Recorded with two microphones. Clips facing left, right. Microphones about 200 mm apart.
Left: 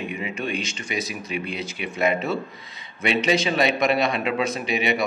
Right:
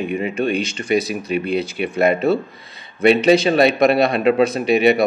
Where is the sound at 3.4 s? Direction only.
35° right (ahead or behind).